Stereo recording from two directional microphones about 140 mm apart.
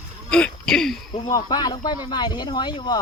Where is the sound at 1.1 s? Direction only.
30° left (ahead or behind).